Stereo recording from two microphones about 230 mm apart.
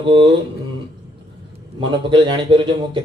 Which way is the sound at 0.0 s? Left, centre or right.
Right.